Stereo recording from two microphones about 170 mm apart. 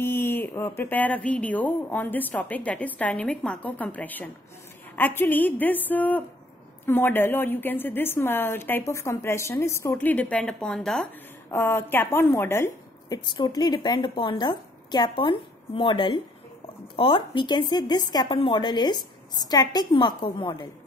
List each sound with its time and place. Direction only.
0.0 s speech: 15° left (ahead or behind)
11.5 s a woman's voice: 15° left (ahead or behind)